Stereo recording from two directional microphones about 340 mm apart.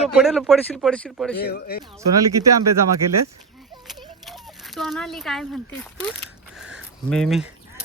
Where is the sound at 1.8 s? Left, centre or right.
Centre.